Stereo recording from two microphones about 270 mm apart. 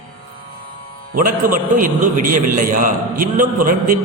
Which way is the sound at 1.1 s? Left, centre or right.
Right.